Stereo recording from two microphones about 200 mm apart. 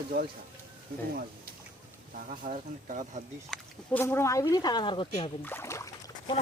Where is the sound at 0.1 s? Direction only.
50° right (ahead or behind).